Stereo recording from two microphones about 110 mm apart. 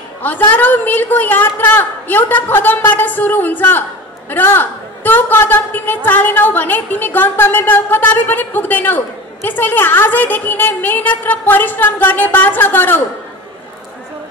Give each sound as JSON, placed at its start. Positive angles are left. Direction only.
{"t": 0.2, "sound": "a woman's voice", "side_deg": 15}